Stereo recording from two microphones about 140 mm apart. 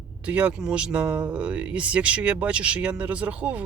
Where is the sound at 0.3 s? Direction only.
10° right (ahead or behind).